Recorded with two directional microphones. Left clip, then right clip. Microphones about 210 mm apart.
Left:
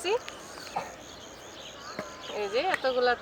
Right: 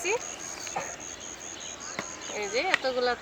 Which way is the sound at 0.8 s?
40° right (ahead or behind).